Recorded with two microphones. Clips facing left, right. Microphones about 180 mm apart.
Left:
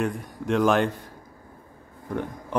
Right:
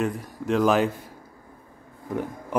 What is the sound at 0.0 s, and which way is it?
Speech, centre (ahead or behind).